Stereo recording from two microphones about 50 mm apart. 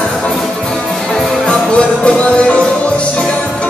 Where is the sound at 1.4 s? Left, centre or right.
Left.